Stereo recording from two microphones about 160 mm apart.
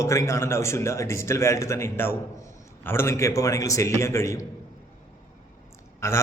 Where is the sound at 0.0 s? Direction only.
20° left (ahead or behind).